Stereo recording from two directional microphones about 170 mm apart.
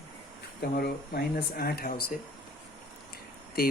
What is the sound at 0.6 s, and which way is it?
Speech, 65° left (ahead or behind).